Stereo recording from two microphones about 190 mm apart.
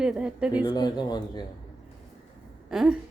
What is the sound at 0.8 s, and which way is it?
Speech, 20° left (ahead or behind).